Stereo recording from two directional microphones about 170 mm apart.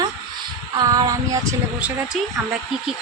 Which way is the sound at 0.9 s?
20° right (ahead or behind).